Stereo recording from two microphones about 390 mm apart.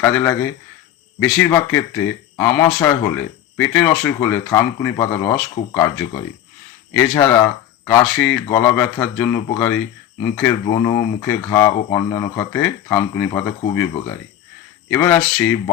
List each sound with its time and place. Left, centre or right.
0.0 s speech: centre
6.9 s speech: centre
14.8 s speech: centre